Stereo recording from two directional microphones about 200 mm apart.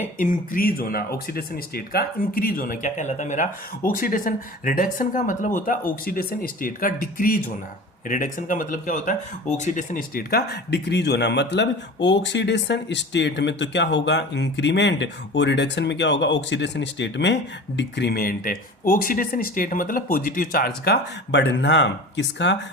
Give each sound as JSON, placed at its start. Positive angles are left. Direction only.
{"t": 0.2, "sound": "a man's voice", "side_deg": 45}